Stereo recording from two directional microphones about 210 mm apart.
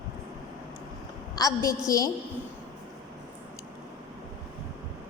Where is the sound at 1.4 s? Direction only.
15° left (ahead or behind).